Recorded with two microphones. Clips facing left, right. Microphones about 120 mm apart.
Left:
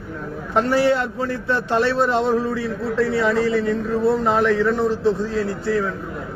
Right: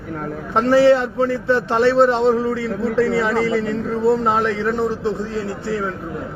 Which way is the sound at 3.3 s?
90° right.